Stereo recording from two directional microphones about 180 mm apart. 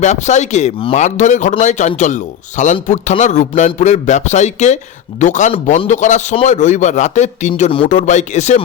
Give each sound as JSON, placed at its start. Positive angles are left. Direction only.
{"t": 0.0, "sound": "a man's voice", "side_deg": 40}